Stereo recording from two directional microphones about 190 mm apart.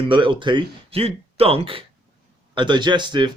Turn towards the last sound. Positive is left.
turn(degrees=-25)  # may be behind; listen again after turning